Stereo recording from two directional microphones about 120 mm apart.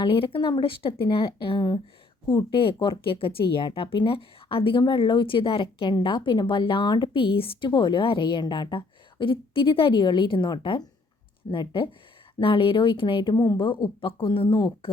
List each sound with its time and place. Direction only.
0.0 s speech: 45° left (ahead or behind)
13.3 s a woman's voice: 35° left (ahead or behind)